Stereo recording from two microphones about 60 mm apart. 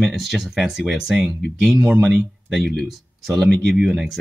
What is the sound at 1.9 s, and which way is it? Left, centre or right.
Speech, centre.